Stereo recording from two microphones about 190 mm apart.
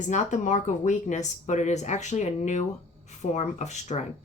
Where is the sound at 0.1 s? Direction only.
40° left (ahead or behind).